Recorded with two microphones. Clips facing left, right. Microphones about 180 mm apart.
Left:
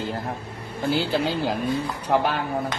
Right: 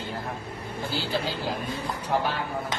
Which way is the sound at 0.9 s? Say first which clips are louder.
Left 5 dB; 60° left (ahead or behind).